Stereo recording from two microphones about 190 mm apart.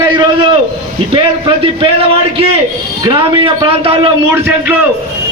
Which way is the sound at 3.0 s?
30° right (ahead or behind).